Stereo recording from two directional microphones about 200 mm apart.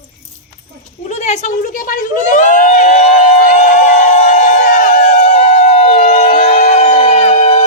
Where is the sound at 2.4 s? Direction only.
40° left (ahead or behind).